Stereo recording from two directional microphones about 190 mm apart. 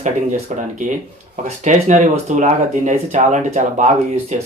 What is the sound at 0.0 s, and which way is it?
Speech, 40° right (ahead or behind).